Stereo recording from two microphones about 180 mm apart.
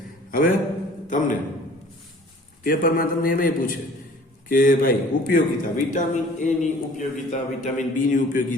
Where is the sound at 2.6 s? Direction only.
50° left (ahead or behind).